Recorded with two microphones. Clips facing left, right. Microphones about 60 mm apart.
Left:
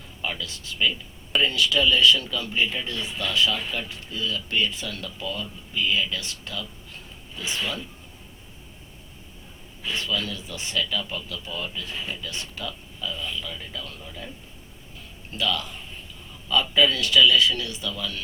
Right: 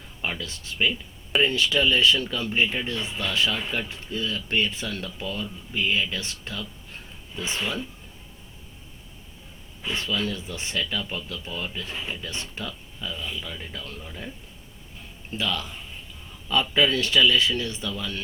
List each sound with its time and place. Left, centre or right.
0.2 s speech: right
9.8 s speech: right
15.4 s speech: right